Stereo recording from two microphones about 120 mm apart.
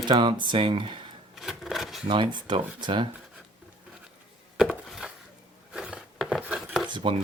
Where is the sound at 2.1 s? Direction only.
40° right (ahead or behind).